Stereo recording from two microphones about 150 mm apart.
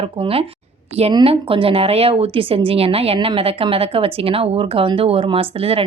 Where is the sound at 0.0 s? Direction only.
40° right (ahead or behind).